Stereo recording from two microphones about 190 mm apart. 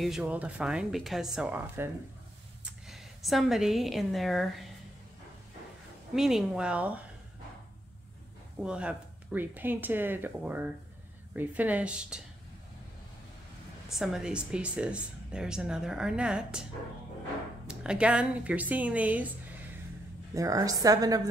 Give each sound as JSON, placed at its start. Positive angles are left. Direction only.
{"t": 0.0, "sound": "a woman's voice", "side_deg": -5}
{"t": 6.1, "sound": "speech", "side_deg": 0}
{"t": 8.5, "sound": "speech", "side_deg": -5}
{"t": 13.9, "sound": "speech", "side_deg": 0}
{"t": 17.6, "sound": "speech", "side_deg": -5}
{"t": 20.3, "sound": "a woman's voice", "side_deg": -15}